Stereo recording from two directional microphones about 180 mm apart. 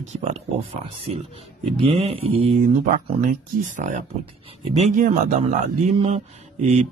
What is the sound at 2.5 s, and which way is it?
A man's voice, 45° right (ahead or behind).